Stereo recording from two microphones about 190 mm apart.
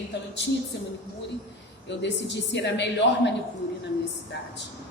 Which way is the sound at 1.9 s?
65° left (ahead or behind).